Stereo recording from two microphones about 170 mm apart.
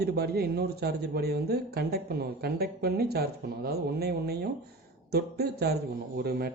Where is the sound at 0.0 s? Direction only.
70° right (ahead or behind).